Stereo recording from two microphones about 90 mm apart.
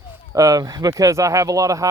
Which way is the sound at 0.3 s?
40° right (ahead or behind).